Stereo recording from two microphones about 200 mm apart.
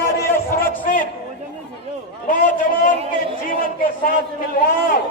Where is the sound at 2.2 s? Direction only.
40° left (ahead or behind).